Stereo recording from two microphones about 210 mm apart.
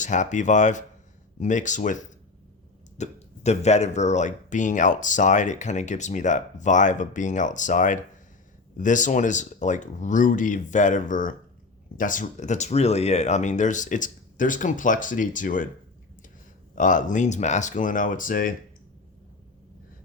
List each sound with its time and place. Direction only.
0.0 s speech: 35° left (ahead or behind)
3.0 s speech: 30° left (ahead or behind)
16.7 s speech: 40° left (ahead or behind)